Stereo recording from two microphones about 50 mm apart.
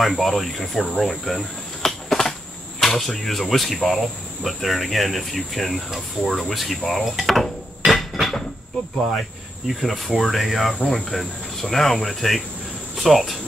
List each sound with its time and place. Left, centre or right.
0.0 s speech: centre
9.8 s speech: centre